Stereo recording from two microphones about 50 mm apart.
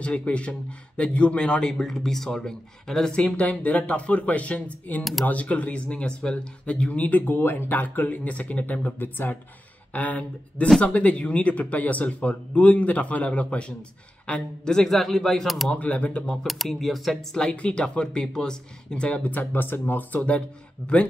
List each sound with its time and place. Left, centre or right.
0.2 s speech: left
3.3 s speech: left
9.9 s speech: left; by 15.7 s centre
15.7 s speech: left
16.4 s speech: centre
17.6 s speech: left
19.0 s speech: left
19.5 s speech: left